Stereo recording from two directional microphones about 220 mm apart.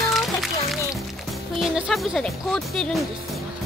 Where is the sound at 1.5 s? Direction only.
Centre (ahead or behind).